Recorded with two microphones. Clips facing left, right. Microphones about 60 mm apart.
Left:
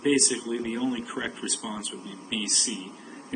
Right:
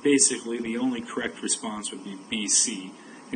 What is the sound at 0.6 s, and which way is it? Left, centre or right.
Speech, right.